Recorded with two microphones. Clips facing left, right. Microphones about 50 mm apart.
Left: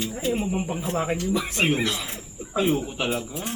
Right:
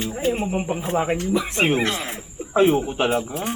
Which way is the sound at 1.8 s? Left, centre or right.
Right.